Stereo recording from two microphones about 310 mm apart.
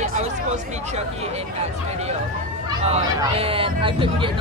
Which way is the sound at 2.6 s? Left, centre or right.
Centre.